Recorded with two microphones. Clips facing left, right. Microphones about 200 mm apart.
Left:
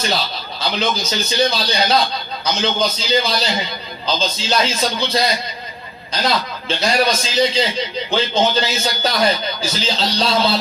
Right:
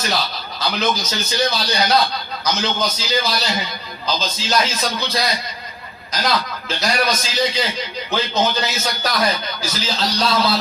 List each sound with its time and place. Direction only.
0.6 s a man's voice: 25° left (ahead or behind)